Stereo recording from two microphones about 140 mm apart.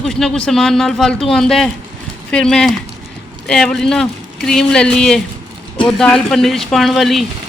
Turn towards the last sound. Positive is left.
turn(degrees=0)  # may be behind; listen again after turning